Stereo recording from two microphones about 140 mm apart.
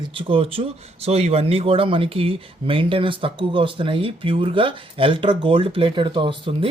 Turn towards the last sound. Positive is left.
turn(degrees=-35)  # may be behind; listen again after turning